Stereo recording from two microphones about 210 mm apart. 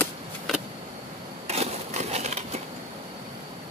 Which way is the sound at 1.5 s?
30° right (ahead or behind).